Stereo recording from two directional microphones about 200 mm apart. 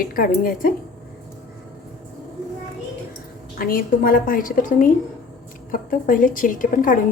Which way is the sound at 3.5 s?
45° left (ahead or behind).